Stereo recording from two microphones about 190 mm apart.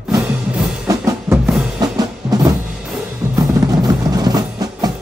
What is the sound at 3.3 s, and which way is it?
Music, 15° right (ahead or behind).